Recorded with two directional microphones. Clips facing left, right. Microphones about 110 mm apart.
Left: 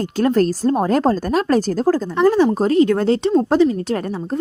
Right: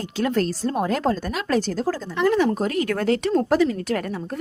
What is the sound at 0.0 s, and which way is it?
A woman's voice, 45° left (ahead or behind).